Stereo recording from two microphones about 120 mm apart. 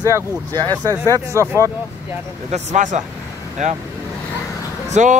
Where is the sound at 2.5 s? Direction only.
80° right.